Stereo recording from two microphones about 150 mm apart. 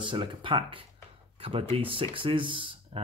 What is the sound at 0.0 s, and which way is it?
Speech, 30° right (ahead or behind).